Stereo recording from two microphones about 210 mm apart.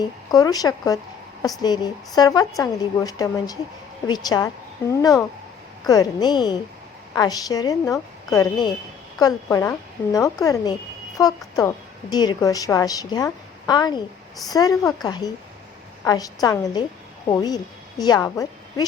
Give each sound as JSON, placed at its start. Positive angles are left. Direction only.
{"t": 0.0, "sound": "a woman's voice", "side_deg": 20}